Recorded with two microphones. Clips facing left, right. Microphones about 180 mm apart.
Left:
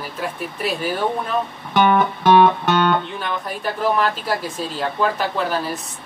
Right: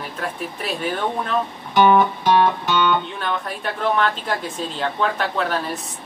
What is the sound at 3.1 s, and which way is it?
A woman's voice, centre (ahead or behind).